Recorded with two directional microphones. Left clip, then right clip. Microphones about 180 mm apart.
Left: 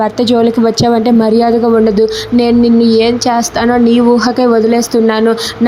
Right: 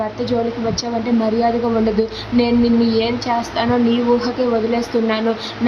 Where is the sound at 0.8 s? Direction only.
45° left (ahead or behind).